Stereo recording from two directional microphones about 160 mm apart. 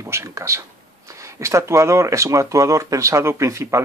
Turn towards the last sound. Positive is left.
turn(degrees=-20)  # may be behind; listen again after turning